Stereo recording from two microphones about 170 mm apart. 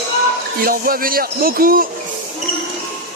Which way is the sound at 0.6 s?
60° right (ahead or behind).